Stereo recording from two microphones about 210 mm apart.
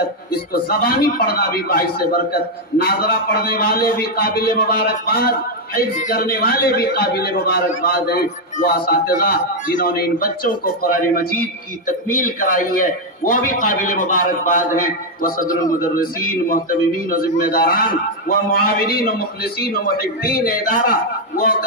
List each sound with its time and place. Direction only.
0.5 s a man's voice: 45° left (ahead or behind)
12.4 s a man's voice: 40° left (ahead or behind)